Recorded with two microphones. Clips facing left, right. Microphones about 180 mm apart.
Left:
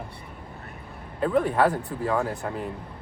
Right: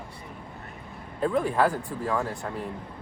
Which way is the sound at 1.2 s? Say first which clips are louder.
Left 2 dB; 5° left (ahead or behind).